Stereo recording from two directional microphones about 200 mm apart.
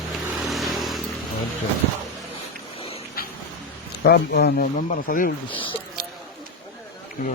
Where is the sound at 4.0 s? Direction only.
55° left (ahead or behind).